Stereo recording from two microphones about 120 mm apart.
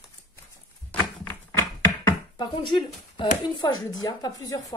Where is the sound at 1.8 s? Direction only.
30° left (ahead or behind).